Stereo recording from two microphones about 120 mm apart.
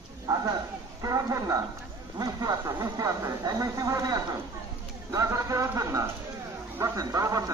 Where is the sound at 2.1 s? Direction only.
30° right (ahead or behind).